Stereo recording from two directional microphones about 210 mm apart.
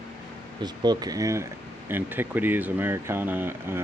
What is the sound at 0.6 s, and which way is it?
Speech, 20° right (ahead or behind).